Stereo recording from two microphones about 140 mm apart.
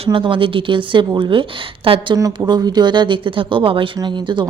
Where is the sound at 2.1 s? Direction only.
25° right (ahead or behind).